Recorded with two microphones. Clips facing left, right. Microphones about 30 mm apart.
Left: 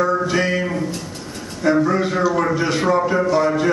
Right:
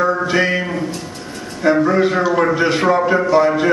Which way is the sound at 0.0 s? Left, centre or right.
Centre.